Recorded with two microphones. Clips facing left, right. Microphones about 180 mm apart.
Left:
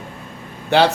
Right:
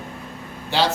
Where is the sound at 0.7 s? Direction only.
60° left (ahead or behind).